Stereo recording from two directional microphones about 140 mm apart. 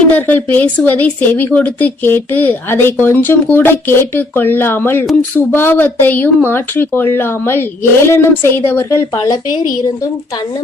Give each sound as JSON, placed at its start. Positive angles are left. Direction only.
{"t": 0.2, "sound": "a woman's voice", "side_deg": 15}